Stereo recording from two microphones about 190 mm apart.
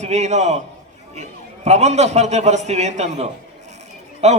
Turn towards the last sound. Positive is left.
turn(degrees=-35)  # may be behind; listen again after turning